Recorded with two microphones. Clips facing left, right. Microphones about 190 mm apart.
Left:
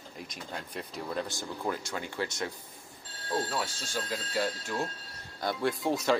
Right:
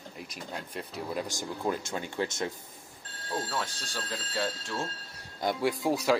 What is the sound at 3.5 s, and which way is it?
Speech, 10° left (ahead or behind).